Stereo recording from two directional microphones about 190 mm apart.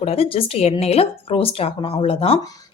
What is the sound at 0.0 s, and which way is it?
A woman's voice, 30° left (ahead or behind).